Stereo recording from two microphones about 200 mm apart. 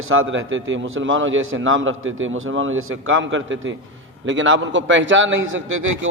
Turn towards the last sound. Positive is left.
turn(degrees=-75)  # may be behind; listen again after turning